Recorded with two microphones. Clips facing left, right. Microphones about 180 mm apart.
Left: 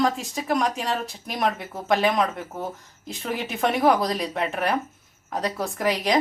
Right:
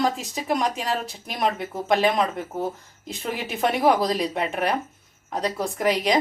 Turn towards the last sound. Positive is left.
turn(degrees=0)  # may be behind; listen again after turning